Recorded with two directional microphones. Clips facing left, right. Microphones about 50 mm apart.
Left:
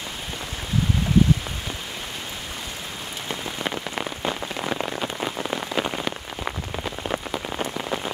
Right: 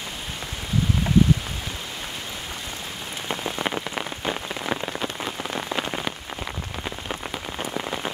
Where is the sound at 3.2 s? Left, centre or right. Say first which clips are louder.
Right 2 dB; centre.